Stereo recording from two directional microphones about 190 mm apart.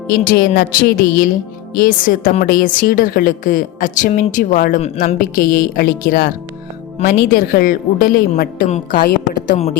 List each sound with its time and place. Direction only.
0.1 s a woman's voice: 50° left (ahead or behind)